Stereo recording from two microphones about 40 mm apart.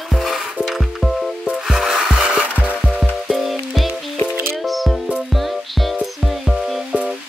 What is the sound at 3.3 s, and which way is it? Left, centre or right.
Music, centre.